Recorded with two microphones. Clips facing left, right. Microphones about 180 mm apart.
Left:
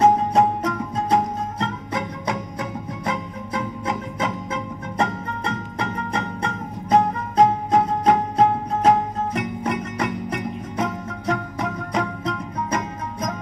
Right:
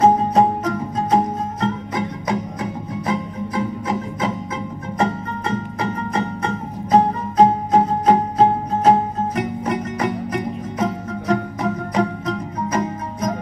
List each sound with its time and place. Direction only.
0.0 s music: 30° right (ahead or behind)
5.5 s music: 30° right (ahead or behind)